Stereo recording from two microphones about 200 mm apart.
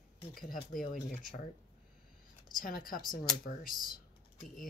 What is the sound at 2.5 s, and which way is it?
Speech, 45° left (ahead or behind).